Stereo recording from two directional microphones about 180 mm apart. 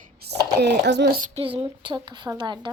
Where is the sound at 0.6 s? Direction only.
70° right (ahead or behind).